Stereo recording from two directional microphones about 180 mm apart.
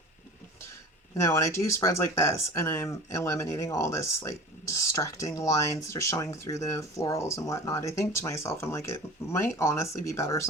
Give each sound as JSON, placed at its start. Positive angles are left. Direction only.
{"t": 1.1, "sound": "speech", "side_deg": 15}